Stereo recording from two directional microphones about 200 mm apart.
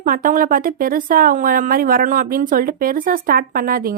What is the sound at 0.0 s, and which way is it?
Speech, 45° right (ahead or behind).